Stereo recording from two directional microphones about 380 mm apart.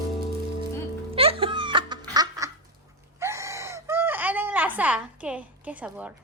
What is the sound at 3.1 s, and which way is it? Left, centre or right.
Wail, centre.